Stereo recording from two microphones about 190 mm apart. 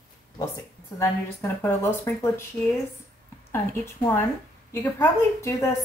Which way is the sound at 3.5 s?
10° left (ahead or behind).